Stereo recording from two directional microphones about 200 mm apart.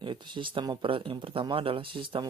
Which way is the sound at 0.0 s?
25° right (ahead or behind).